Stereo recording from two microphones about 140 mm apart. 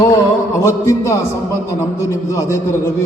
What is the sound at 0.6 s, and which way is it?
A man's voice, 20° left (ahead or behind).